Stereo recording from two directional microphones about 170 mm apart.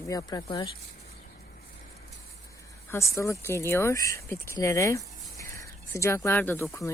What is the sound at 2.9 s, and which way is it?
Speech, 15° left (ahead or behind).